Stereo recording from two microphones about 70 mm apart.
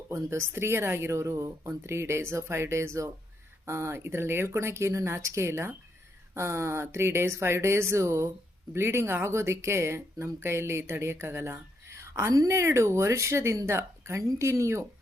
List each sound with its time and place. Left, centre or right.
0.1 s a woman's voice: right